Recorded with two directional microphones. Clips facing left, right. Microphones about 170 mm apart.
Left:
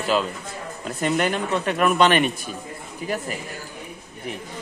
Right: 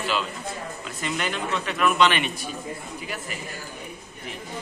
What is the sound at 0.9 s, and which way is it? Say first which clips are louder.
Speech: left 7 dB; 50° left (ahead or behind).